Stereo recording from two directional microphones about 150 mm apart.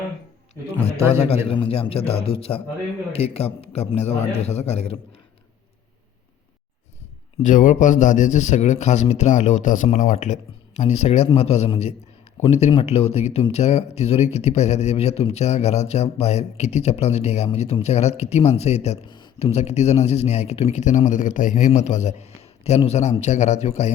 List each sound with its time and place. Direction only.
1.5 s a man's voice: 40° left (ahead or behind)
7.4 s a man's voice: 60° left (ahead or behind)
19.1 s a sound: 30° left (ahead or behind)
19.5 s a man's voice: 45° left (ahead or behind)